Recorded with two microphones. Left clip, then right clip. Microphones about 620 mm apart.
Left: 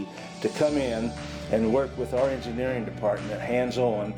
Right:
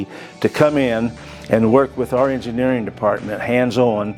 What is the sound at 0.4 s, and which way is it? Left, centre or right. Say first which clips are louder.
Speech: right 9 dB; right.